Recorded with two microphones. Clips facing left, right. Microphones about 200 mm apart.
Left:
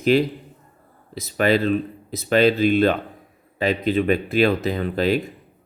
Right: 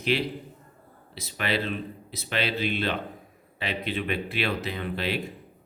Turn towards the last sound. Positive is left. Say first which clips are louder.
# left 9 dB
turn(degrees=45)  # may be behind; listen again after turning